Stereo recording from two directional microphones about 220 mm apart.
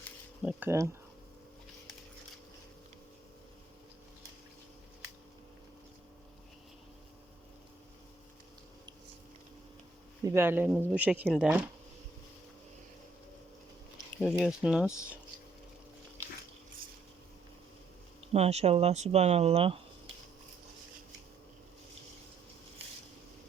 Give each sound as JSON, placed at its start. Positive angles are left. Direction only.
{"t": 0.4, "sound": "speech", "side_deg": -10}
{"t": 10.2, "sound": "speech", "side_deg": -10}
{"t": 14.2, "sound": "speech", "side_deg": 0}
{"t": 18.3, "sound": "speech", "side_deg": -30}